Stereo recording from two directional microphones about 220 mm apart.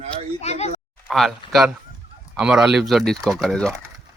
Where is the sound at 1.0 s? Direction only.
Centre (ahead or behind).